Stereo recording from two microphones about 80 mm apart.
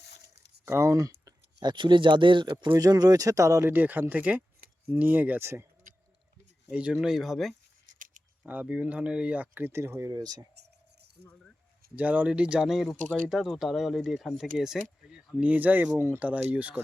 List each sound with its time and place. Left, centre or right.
0.6 s speech: right
1.6 s speech: right
2.7 s speech: right
3.7 s speech: right
6.7 s speech: centre
7.1 s speech: centre
8.4 s speech: centre; by 10.4 s right
11.9 s speech: centre
15.4 s speech: centre